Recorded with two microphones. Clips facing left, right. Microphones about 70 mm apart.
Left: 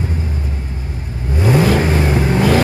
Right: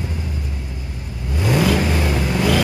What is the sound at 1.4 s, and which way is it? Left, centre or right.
Vehicle, left.